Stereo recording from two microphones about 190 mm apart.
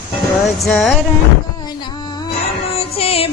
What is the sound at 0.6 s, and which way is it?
Speech, centre (ahead or behind).